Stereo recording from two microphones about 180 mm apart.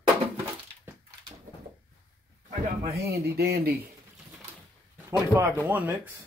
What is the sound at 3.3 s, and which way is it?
Speech, 60° right (ahead or behind).